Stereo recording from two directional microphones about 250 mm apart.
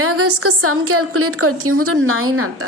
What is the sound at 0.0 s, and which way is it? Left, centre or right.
A woman's voice, right.